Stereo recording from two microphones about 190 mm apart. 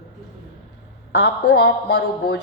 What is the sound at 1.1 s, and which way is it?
A woman's voice, 70° left (ahead or behind).